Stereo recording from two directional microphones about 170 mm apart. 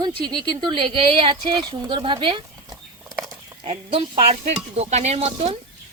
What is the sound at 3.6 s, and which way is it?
Speech, 40° right (ahead or behind).